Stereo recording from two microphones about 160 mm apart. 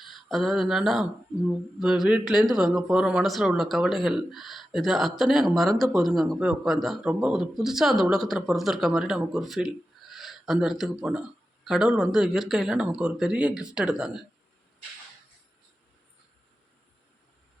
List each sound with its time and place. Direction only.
0.0 s speech: centre (ahead or behind)